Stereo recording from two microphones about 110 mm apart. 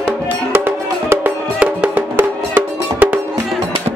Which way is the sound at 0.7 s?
20° right (ahead or behind).